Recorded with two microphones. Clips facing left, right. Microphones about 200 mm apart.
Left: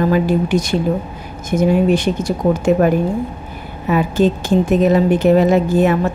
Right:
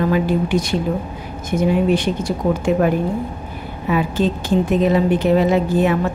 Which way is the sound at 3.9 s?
45° left (ahead or behind).